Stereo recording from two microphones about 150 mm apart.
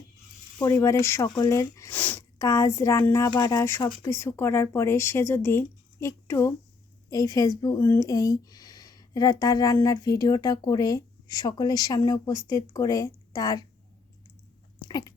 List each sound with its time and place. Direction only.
0.6 s speech: 20° left (ahead or behind)
14.8 s dog: 25° left (ahead or behind)